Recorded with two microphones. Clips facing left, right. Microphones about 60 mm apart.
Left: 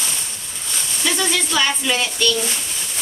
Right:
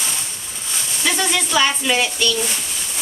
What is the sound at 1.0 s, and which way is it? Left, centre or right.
Speech, centre.